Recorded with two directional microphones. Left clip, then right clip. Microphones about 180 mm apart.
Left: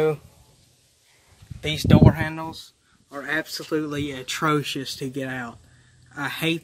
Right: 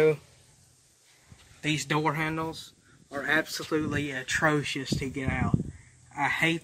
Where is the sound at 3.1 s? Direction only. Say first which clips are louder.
Even; 5° left (ahead or behind).